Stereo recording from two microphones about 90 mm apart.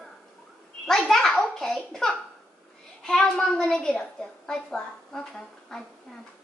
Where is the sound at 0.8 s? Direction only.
5° left (ahead or behind).